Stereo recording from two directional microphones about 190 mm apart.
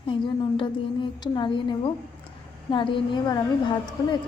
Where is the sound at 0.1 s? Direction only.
25° left (ahead or behind).